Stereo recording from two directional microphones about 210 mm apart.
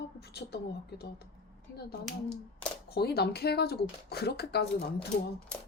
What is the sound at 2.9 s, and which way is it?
Speech, 50° left (ahead or behind).